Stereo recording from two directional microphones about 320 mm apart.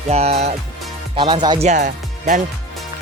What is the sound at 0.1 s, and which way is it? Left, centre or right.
Speech, centre.